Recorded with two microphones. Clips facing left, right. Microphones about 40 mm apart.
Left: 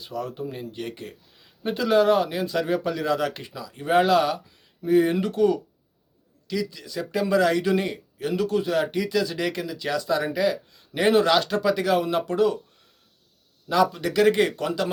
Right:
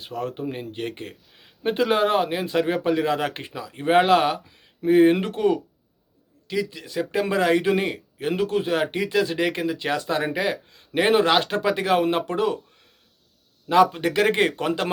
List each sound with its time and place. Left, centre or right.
0.0 s a man's voice: right
13.7 s a man's voice: right